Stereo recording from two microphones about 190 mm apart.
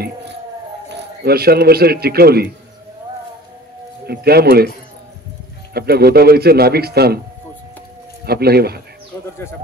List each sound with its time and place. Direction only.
0.8 s speech: 55° right (ahead or behind)
4.0 s a man's voice: 55° right (ahead or behind)
5.7 s a man's voice: 55° right (ahead or behind)
8.3 s a man's voice: 55° right (ahead or behind)